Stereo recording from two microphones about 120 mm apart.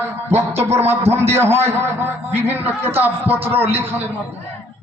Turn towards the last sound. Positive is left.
turn(degrees=-20)  # may be behind; listen again after turning